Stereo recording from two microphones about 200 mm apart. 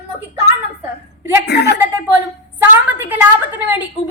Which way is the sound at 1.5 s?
55° left (ahead or behind).